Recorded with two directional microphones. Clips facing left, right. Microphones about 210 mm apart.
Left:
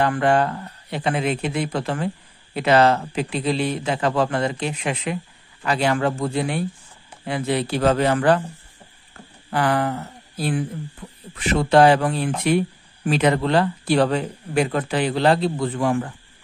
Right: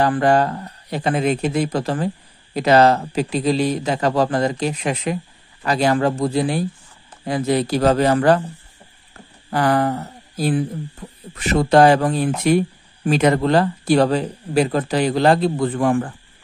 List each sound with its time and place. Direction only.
0.0 s speech: 40° right (ahead or behind)
9.5 s speech: 40° right (ahead or behind)